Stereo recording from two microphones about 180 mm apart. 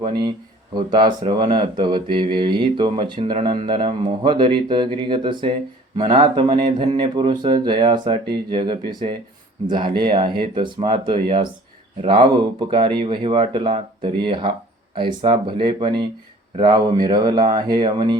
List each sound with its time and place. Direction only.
0.0 s speech: 25° right (ahead or behind)